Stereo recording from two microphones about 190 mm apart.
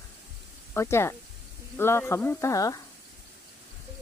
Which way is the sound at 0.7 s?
15° left (ahead or behind).